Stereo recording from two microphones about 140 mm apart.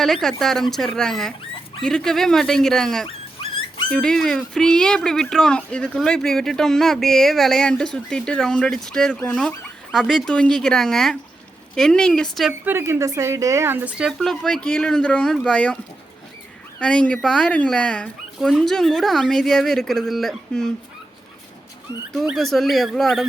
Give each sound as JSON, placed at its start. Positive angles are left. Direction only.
{"t": 0.0, "sound": "speech", "side_deg": 0}
{"t": 12.6, "sound": "speech", "side_deg": -20}
{"t": 14.1, "sound": "speech", "side_deg": 5}
{"t": 16.8, "sound": "speech", "side_deg": 5}
{"t": 22.1, "sound": "speech", "side_deg": 0}